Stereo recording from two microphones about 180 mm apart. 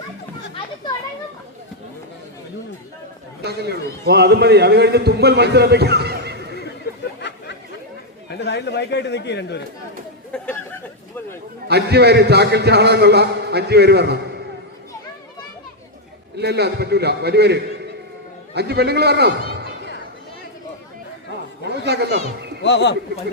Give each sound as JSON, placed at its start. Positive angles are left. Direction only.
{"t": 3.4, "sound": "a man's voice", "side_deg": -65}
{"t": 7.2, "sound": "chatter", "side_deg": 70}
{"t": 8.3, "sound": "speech", "side_deg": 70}
{"t": 11.7, "sound": "a man's voice", "side_deg": -65}
{"t": 16.4, "sound": "a man's voice", "side_deg": -65}
{"t": 21.8, "sound": "a sound", "side_deg": -65}
{"t": 22.6, "sound": "speech", "side_deg": 75}